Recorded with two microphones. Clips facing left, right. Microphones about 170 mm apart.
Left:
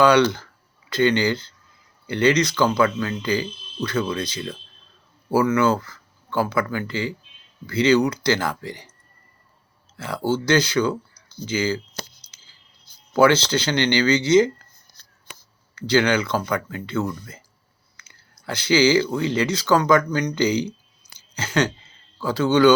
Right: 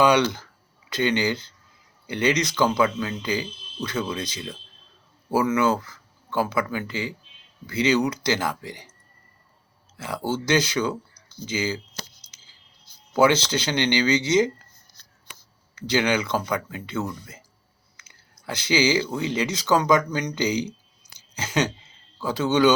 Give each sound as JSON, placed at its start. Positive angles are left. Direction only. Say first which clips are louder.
{"t": 0.0, "sound": "speech", "louder": "left 3 dB", "side_deg": -15}
{"t": 10.0, "sound": "speech", "louder": "left 4 dB", "side_deg": -15}
{"t": 13.1, "sound": "speech", "louder": "left 3 dB", "side_deg": -20}
{"t": 15.7, "sound": "speech", "louder": "left 3 dB", "side_deg": -20}